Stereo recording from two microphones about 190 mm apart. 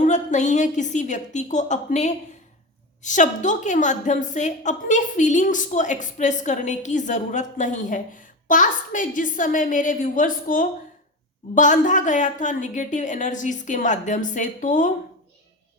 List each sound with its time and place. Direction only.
0.0 s a woman's voice: 40° left (ahead or behind)